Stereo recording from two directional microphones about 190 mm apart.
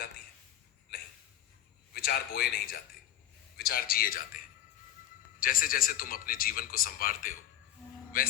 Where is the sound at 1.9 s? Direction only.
55° left (ahead or behind).